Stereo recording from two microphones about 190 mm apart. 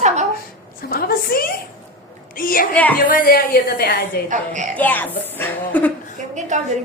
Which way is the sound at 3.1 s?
50° left (ahead or behind).